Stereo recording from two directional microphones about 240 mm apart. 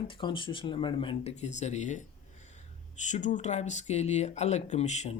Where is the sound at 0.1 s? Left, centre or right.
Centre.